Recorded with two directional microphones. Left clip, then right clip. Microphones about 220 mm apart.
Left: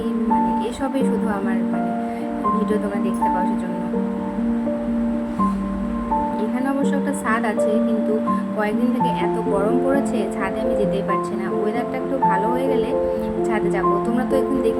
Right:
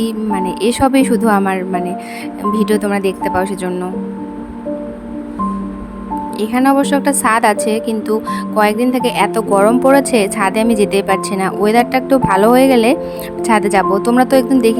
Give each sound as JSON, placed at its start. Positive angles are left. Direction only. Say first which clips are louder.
{"t": 0.6, "sound": "a woman's voice", "louder": "right 10 dB", "side_deg": -50}
{"t": 2.6, "sound": "a woman's voice", "louder": "right 7 dB", "side_deg": -55}
{"t": 6.5, "sound": "a woman's voice", "louder": "right 10 dB", "side_deg": -50}